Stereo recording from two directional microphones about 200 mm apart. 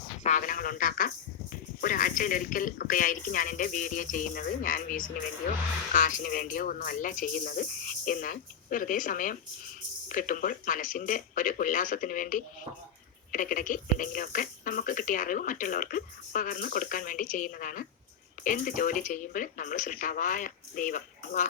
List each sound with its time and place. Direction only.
0.2 s speech: 40° left (ahead or behind)